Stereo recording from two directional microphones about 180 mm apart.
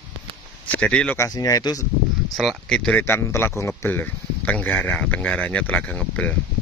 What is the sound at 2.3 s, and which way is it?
Speech, centre (ahead or behind).